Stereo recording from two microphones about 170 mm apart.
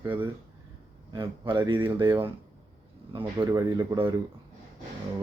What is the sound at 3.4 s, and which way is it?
Speech, 20° right (ahead or behind).